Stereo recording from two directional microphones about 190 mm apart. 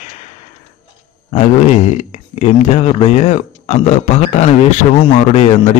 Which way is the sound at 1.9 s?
35° left (ahead or behind).